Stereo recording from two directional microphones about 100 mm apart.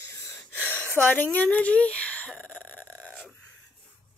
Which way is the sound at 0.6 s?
15° left (ahead or behind).